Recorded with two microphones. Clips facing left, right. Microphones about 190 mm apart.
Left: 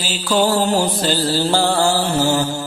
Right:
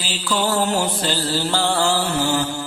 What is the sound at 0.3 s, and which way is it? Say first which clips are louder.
Mantra: left 4 dB; 40° left (ahead or behind).